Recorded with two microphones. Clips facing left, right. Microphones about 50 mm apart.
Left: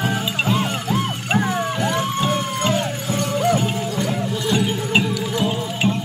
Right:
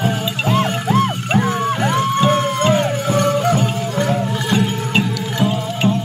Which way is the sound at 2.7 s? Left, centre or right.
Right.